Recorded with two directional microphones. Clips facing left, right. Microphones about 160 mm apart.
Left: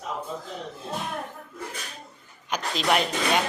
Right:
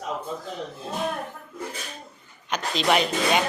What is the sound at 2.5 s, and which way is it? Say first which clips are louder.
Speech: right 2 dB; 5° left (ahead or behind).